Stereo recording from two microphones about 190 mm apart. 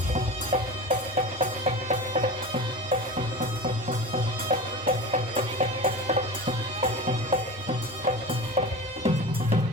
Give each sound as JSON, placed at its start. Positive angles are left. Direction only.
{"t": 0.1, "sound": "music", "side_deg": -35}